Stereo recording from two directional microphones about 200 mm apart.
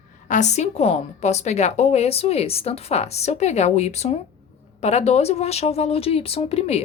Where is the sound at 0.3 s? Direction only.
35° left (ahead or behind).